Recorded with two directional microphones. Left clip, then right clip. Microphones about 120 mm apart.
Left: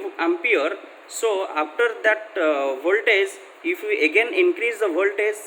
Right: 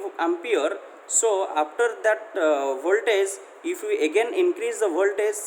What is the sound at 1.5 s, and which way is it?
A man's voice, 35° right (ahead or behind).